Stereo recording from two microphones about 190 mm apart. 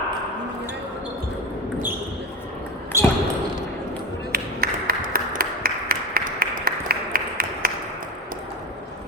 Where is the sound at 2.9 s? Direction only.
15° right (ahead or behind).